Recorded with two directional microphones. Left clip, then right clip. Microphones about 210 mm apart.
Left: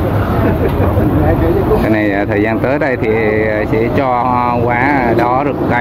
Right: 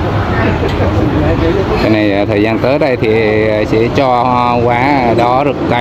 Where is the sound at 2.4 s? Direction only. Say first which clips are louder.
Right 2 dB; 35° right (ahead or behind).